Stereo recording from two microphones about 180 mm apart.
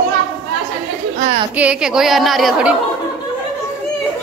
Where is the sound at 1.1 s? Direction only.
35° right (ahead or behind).